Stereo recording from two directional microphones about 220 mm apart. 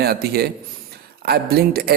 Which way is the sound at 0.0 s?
45° right (ahead or behind).